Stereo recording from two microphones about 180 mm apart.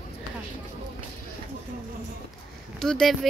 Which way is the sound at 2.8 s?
Centre (ahead or behind).